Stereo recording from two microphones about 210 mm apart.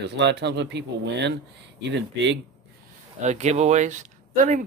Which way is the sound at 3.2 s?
35° right (ahead or behind).